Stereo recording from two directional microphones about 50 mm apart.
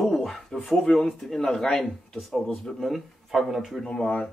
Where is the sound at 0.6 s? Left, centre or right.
Centre.